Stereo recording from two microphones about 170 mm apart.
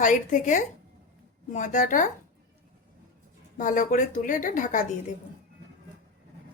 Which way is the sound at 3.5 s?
50° left (ahead or behind).